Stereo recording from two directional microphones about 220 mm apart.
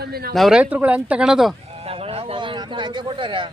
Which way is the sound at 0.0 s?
45° right (ahead or behind).